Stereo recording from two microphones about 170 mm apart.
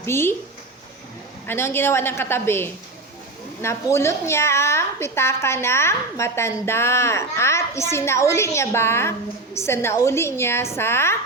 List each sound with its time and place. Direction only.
0.0 s a woman's voice: 15° left (ahead or behind)
1.5 s a woman's voice: 15° left (ahead or behind)